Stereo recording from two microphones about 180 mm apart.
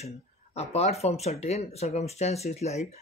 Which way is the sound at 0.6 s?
35° left (ahead or behind).